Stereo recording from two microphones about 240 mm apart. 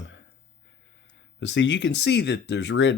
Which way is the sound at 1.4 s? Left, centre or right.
Left.